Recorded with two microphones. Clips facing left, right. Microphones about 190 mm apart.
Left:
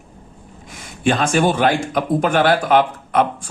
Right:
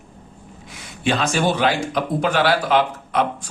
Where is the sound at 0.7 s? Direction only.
50° left (ahead or behind).